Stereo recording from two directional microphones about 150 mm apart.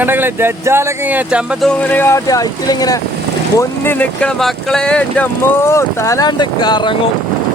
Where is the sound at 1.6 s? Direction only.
10° left (ahead or behind).